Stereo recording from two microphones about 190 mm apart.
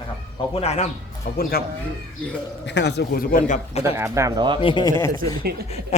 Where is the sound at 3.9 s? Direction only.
15° right (ahead or behind).